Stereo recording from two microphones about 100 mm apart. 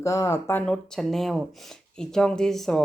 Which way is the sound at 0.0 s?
30° left (ahead or behind).